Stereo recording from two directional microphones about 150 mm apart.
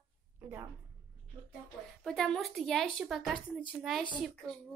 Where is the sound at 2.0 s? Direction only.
5° left (ahead or behind).